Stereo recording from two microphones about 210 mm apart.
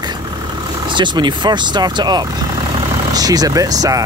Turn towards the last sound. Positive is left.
turn(degrees=-15)  # may be behind; listen again after turning